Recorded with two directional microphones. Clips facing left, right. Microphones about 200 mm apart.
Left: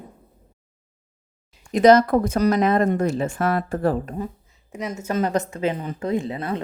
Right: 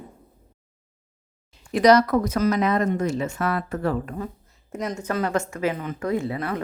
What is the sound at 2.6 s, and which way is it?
Speech, 50° left (ahead or behind).